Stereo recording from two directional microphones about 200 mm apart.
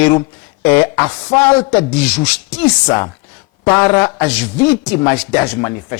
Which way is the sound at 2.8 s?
20° left (ahead or behind).